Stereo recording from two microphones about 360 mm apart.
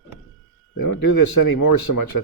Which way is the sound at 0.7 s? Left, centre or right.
Left.